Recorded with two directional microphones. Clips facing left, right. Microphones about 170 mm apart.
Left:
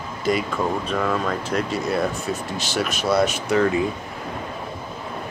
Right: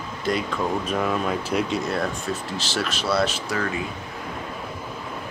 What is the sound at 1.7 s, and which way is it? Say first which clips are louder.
Speech: left 2 dB; 10° left (ahead or behind).